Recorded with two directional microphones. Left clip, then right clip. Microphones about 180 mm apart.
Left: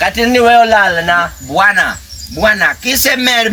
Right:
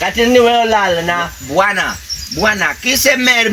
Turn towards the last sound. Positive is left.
turn(degrees=30)  # may be behind; listen again after turning